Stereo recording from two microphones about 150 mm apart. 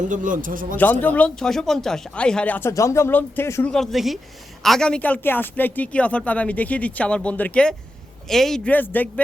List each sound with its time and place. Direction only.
0.1 s speech: 60° right (ahead or behind)
0.8 s speech: 10° left (ahead or behind)
3.7 s speech: centre (ahead or behind)